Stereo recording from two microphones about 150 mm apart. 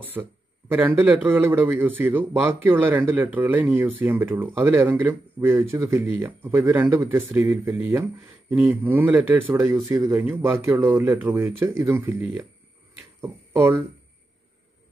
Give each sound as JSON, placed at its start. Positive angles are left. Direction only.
{"t": 0.0, "sound": "speech", "side_deg": -15}